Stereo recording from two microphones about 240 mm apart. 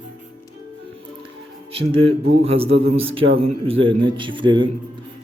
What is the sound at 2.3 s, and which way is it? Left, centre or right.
A man's voice, right.